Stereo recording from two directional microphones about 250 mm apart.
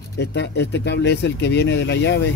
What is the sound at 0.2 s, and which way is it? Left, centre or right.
Speech, left.